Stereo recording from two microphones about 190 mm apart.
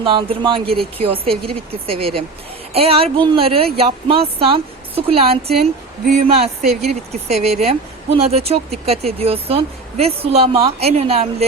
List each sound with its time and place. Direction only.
0.0 s speech: 25° right (ahead or behind)